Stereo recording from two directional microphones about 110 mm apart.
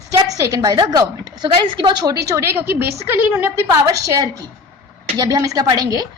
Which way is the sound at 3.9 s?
30° right (ahead or behind).